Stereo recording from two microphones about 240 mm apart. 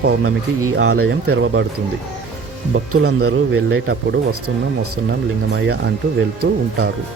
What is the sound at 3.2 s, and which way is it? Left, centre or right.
Speech, right.